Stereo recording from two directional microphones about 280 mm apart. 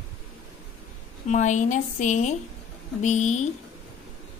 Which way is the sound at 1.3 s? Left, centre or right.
Left.